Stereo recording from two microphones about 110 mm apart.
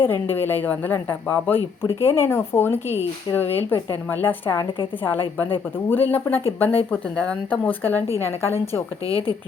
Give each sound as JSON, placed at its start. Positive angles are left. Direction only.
{"t": 0.0, "sound": "speech", "side_deg": 20}
{"t": 9.0, "sound": "speech", "side_deg": 55}